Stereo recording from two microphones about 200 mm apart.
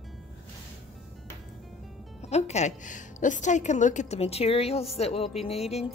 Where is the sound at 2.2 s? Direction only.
35° left (ahead or behind).